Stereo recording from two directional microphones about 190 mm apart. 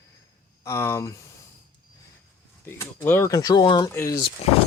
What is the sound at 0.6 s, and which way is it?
Speech, 15° left (ahead or behind).